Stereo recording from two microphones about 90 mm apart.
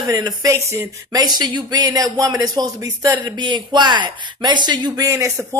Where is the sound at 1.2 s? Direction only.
50° right (ahead or behind).